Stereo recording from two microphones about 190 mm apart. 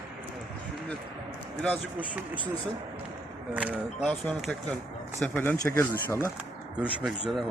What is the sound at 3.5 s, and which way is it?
Speech, 5° right (ahead or behind).